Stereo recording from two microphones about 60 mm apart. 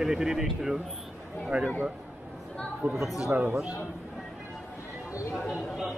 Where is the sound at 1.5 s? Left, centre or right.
Right.